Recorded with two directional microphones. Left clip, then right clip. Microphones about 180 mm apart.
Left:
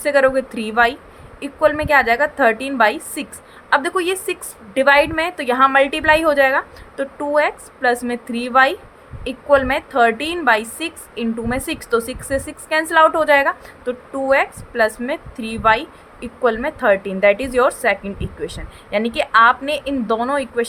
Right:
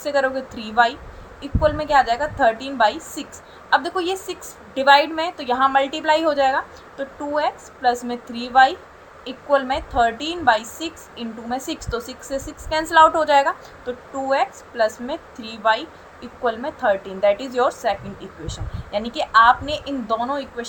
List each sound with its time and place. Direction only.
0.0 s a woman's voice: 55° left (ahead or behind)